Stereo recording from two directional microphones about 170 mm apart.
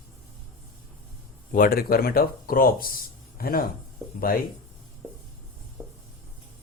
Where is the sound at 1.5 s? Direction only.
60° left (ahead or behind).